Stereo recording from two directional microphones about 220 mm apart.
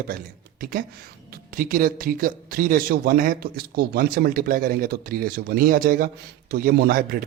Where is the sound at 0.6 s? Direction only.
40° right (ahead or behind).